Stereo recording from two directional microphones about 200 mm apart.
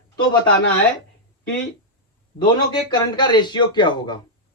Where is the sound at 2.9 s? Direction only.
20° left (ahead or behind).